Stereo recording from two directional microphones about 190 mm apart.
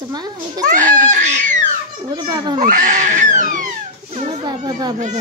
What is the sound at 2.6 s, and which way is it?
Speech, 40° right (ahead or behind).